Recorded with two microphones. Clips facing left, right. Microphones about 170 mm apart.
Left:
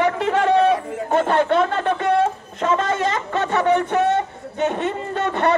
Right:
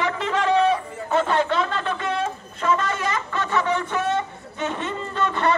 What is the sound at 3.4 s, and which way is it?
A man's voice, 60° left (ahead or behind).